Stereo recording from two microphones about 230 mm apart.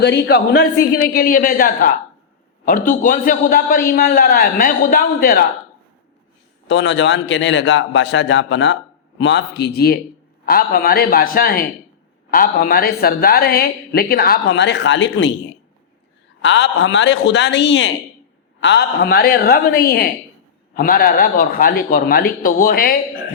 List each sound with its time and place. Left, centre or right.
0.0 s a man's voice: left
6.7 s a man's voice: left
16.4 s a man's voice: left